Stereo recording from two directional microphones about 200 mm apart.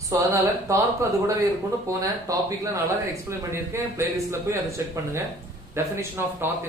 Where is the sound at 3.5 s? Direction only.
10° right (ahead or behind).